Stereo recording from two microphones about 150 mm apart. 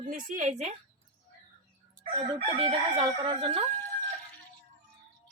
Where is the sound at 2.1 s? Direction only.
35° right (ahead or behind).